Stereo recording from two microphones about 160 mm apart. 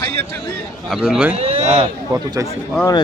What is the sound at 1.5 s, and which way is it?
Speech, 40° right (ahead or behind).